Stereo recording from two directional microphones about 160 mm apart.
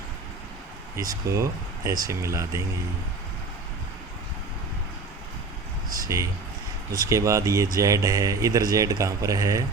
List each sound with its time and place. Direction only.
0.9 s speech: 20° right (ahead or behind)
5.9 s a sound: 20° right (ahead or behind)
6.9 s speech: 20° right (ahead or behind)